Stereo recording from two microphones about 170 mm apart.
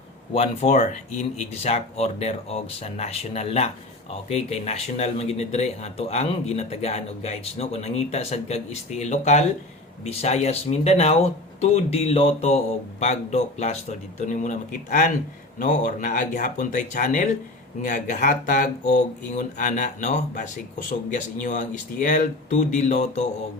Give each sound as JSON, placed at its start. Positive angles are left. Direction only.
{"t": 0.3, "sound": "speech", "side_deg": 45}